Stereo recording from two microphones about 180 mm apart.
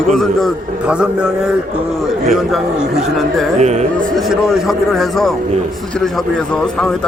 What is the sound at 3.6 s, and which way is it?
Speech, 40° right (ahead or behind).